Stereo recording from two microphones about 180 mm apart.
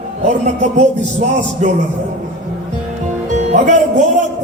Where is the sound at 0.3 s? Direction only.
40° right (ahead or behind).